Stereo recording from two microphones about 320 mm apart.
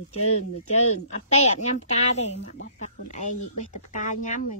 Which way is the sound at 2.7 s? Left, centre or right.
Left.